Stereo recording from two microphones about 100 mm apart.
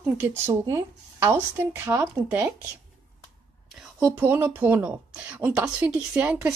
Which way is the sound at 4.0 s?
20° right (ahead or behind).